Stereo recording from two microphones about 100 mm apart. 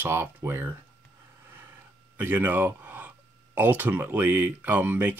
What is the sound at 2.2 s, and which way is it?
Speech, 20° right (ahead or behind).